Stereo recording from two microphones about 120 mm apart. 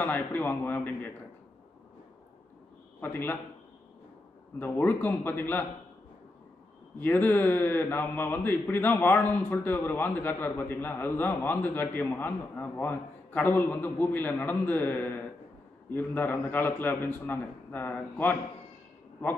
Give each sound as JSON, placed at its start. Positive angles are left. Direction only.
{"t": 0.0, "sound": "a man's voice", "side_deg": 15}
{"t": 3.0, "sound": "a man's voice", "side_deg": 15}
{"t": 4.6, "sound": "a man's voice", "side_deg": 15}
{"t": 7.0, "sound": "a man's voice", "side_deg": 15}